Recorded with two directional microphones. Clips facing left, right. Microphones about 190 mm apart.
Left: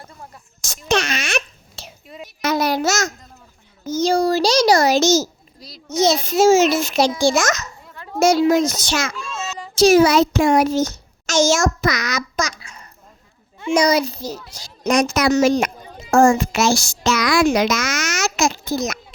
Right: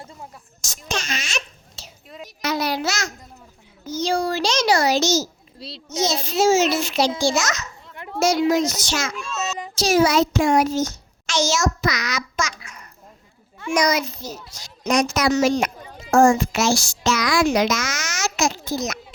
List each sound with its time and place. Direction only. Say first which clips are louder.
0.9 s babbling: left 8 dB; 65° left (ahead or behind)
2.0 s a child's voice: left 1 dB; centre (ahead or behind)
2.4 s a child's voice: left 4 dB; 45° left (ahead or behind)
5.5 s a child's voice: right 5 dB; 30° right (ahead or behind)
6.0 s a child's voice: left 5 dB; 55° left (ahead or behind)
9.4 s a sound: right 4 dB; 20° right (ahead or behind)
9.7 s a child's voice: left 5 dB; 55° left (ahead or behind)
11.3 s a child's voice: left 5 dB; 50° left (ahead or behind); by 14.7 s 30° left (ahead or behind)
14.8 s a child's voice: left 3 dB; 50° left (ahead or behind)